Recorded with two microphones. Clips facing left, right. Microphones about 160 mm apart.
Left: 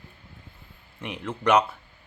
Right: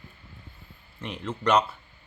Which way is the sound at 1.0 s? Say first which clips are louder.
Left 1 dB; 10° left (ahead or behind).